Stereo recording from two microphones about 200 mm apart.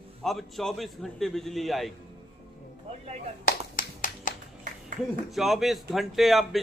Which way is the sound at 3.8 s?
45° left (ahead or behind).